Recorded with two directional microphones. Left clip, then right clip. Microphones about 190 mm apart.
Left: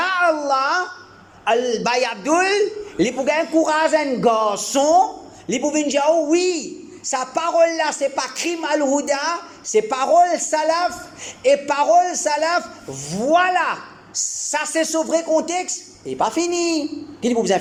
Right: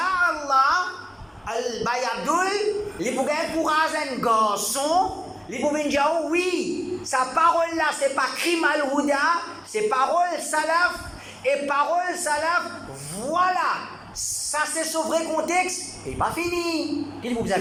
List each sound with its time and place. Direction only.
0.0 s babbling: 40° left (ahead or behind)
1.5 s a man's voice: 45° left (ahead or behind)